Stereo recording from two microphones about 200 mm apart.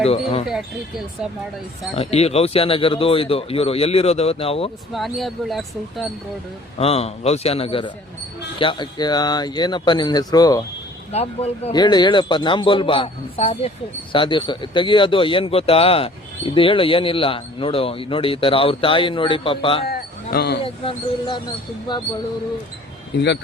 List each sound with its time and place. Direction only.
0.0 s a man's voice: 30° left (ahead or behind)
0.4 s speech: centre (ahead or behind)
2.0 s a man's voice: 30° left (ahead or behind)
4.9 s speech: centre (ahead or behind)
6.7 s a man's voice: 30° left (ahead or behind)
11.1 s a man's voice: 30° left (ahead or behind)
19.8 s a sound: 50° left (ahead or behind)
20.7 s a man's voice: 25° left (ahead or behind)